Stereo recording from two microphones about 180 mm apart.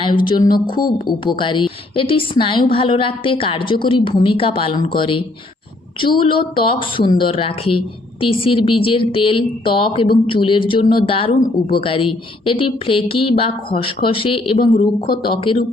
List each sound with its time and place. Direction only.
0.3 s speech: 25° left (ahead or behind)
14.8 s speech: 55° left (ahead or behind)
15.2 s speech: 30° left (ahead or behind)